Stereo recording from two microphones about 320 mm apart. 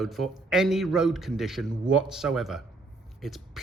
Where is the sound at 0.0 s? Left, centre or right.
Centre.